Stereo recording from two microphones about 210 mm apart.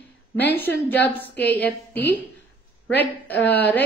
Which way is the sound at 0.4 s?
10° left (ahead or behind).